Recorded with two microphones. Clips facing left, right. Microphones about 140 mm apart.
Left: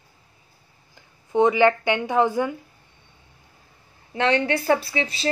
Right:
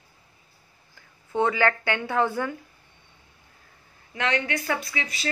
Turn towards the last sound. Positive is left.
turn(degrees=30)  # may be behind; listen again after turning